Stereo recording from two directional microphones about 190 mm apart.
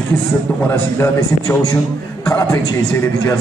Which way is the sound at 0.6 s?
15° left (ahead or behind).